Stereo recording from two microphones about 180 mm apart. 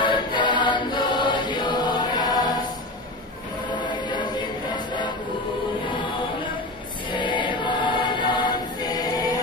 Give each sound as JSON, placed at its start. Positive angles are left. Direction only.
{"t": 0.0, "sound": "music", "side_deg": 25}
{"t": 7.1, "sound": "choir", "side_deg": 25}
{"t": 8.9, "sound": "music", "side_deg": 20}